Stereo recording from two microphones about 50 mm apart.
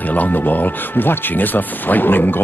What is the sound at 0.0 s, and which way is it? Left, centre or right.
Speech, left.